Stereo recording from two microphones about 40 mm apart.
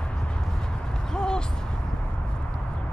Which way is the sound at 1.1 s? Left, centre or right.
Centre.